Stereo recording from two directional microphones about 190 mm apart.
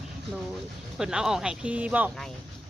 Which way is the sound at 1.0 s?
5° right (ahead or behind).